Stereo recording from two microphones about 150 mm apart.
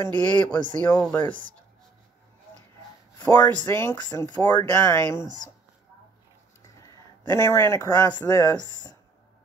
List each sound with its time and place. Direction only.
0.0 s speech: 10° left (ahead or behind)
3.3 s speech: 15° left (ahead or behind)
3.9 s speech: 25° left (ahead or behind)
7.2 s speech: 15° left (ahead or behind)